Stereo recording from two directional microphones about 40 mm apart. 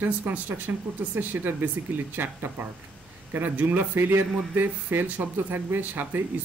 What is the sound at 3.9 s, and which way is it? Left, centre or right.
Speech, right.